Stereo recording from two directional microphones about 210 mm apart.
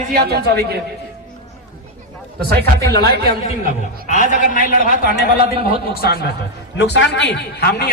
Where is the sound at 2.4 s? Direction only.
50° right (ahead or behind).